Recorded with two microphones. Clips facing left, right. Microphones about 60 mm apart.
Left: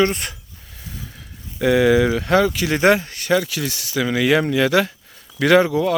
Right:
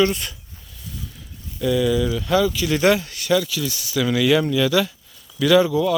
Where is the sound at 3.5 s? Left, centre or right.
Left.